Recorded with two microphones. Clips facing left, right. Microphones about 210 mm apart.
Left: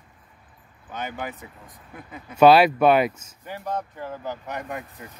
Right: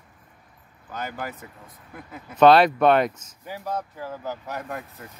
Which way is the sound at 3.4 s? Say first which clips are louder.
Even; 5° right (ahead or behind).